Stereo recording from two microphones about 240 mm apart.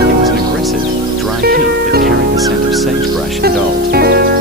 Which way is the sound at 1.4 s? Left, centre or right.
Right.